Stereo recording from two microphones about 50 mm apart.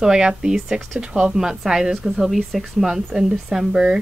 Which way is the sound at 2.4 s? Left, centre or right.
Centre.